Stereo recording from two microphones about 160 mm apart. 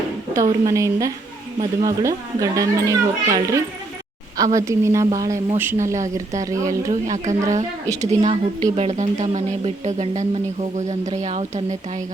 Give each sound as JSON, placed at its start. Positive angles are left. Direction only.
{"t": 0.3, "sound": "speech", "side_deg": -20}
{"t": 6.9, "sound": "speech", "side_deg": -50}